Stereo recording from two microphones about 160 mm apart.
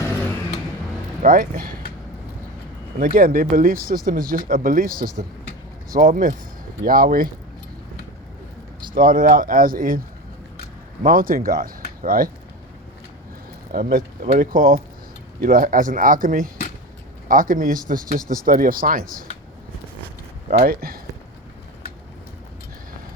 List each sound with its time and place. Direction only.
0.0 s vehicle: 10° left (ahead or behind)
1.2 s speech: 60° right (ahead or behind)
3.0 s speech: 60° right (ahead or behind)
8.9 s speech: 60° right (ahead or behind)
11.0 s speech: 60° right (ahead or behind)
13.7 s speech: 60° right (ahead or behind)
20.5 s speech: 65° right (ahead or behind)